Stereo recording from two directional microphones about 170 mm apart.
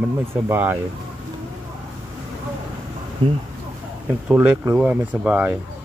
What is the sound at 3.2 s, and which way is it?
Speech, 30° right (ahead or behind).